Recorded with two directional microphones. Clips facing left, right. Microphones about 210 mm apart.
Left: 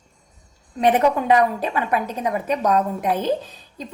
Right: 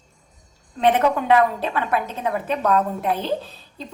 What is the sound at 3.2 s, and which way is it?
Speech, 45° left (ahead or behind).